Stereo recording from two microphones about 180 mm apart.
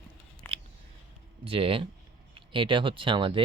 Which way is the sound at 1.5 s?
30° right (ahead or behind).